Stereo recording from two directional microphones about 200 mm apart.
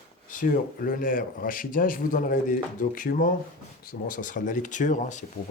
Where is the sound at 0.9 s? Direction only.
45° left (ahead or behind).